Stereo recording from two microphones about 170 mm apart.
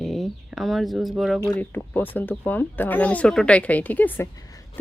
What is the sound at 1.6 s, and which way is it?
A woman's voice, 10° left (ahead or behind).